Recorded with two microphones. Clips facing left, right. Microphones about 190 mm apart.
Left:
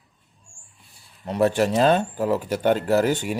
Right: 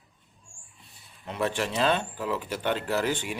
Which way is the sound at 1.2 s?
40° left (ahead or behind).